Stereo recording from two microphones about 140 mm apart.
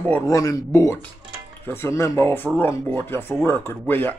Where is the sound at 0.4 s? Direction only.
25° left (ahead or behind).